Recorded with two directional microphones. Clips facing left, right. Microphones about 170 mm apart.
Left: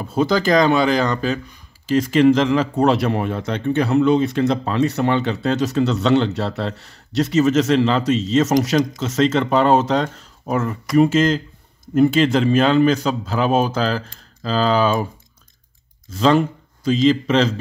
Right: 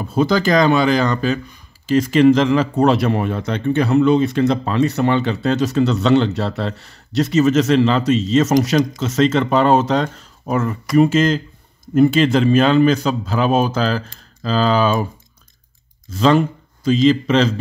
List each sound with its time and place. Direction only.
0.1 s a man's voice: 30° left (ahead or behind)
16.2 s speech: 30° left (ahead or behind)